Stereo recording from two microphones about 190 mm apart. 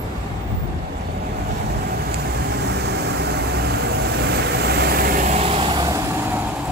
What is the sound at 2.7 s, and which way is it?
Vehicle, 60° right (ahead or behind).